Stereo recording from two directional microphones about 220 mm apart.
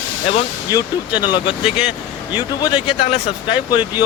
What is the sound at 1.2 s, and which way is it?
Speech, 20° left (ahead or behind).